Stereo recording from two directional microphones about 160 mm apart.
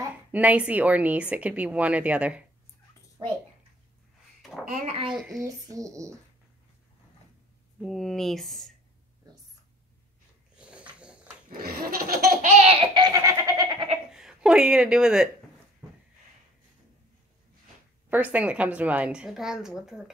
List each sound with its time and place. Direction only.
0.3 s speech: 10° right (ahead or behind)
3.2 s a child's voice: 30° right (ahead or behind)
4.4 s a sound: centre (ahead or behind)
4.6 s a child's voice: 50° right (ahead or behind)
5.1 s speech: 5° right (ahead or behind)
5.4 s a child's voice: 20° right (ahead or behind)
7.8 s speech: centre (ahead or behind)
10.6 s dog: 10° right (ahead or behind)
11.5 s laughter: 65° right (ahead or behind)
12.4 s laughter: 45° right (ahead or behind)
12.9 s goat: 25° right (ahead or behind)
14.1 s a woman's voice: 5° right (ahead or behind)
18.1 s speech: 10° right (ahead or behind)